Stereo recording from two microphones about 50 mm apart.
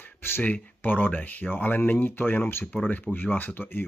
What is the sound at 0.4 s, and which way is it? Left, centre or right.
Speech, left.